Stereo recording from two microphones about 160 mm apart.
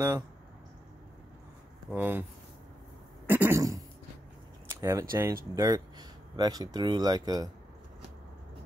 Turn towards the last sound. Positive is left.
turn(degrees=-25)  # may be behind; listen again after turning